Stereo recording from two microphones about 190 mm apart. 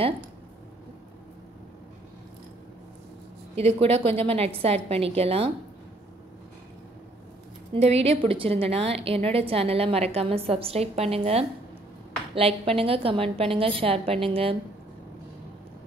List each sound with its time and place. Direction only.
3.5 s a woman's voice: 30° right (ahead or behind)
7.7 s a woman's voice: 30° right (ahead or behind)